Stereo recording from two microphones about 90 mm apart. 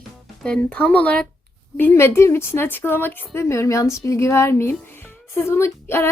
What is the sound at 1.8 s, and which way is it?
Speech, 25° left (ahead or behind).